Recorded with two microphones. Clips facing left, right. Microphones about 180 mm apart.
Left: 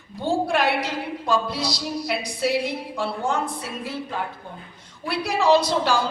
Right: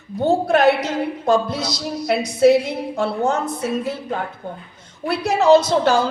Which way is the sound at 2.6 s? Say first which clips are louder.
Right 5 dB; 45° right (ahead or behind).